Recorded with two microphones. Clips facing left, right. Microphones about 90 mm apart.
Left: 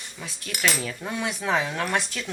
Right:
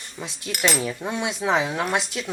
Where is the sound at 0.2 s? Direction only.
20° right (ahead or behind).